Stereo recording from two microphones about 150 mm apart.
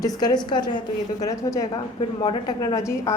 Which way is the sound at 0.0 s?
25° left (ahead or behind).